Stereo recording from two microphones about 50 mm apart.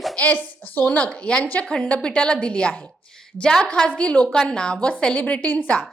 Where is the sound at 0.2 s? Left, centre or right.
Left.